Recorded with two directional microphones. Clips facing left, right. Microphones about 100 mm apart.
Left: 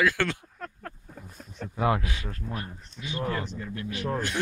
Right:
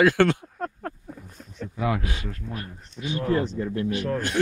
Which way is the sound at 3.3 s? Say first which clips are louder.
Right 11 dB; 30° right (ahead or behind).